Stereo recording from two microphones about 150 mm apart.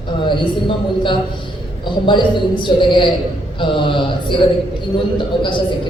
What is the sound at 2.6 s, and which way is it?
A man's voice, 35° left (ahead or behind).